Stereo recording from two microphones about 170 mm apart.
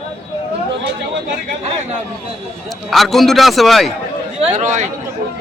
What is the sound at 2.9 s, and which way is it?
A man's voice, centre (ahead or behind).